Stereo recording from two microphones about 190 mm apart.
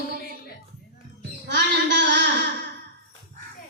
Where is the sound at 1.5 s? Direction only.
65° right (ahead or behind).